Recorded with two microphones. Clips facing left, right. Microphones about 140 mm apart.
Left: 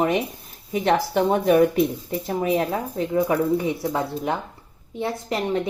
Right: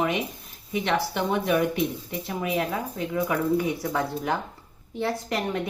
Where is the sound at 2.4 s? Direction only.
30° left (ahead or behind).